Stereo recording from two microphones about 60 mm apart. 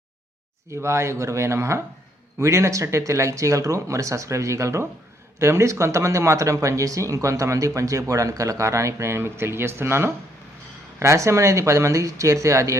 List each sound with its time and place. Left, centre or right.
0.7 s speech: right